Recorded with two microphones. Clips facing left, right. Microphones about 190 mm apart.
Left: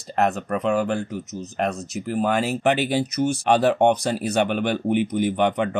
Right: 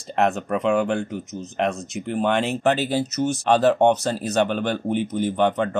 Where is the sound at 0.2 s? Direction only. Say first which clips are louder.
Right 1 dB; centre (ahead or behind).